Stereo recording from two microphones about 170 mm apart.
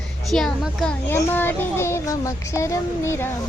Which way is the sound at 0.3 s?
Centre (ahead or behind).